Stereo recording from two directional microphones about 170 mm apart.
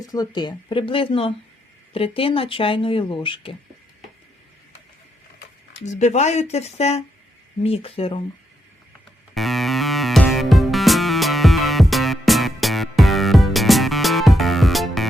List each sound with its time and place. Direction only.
0.0 s speech: 20° left (ahead or behind)
5.8 s speech: 45° left (ahead or behind)
9.3 s music: centre (ahead or behind)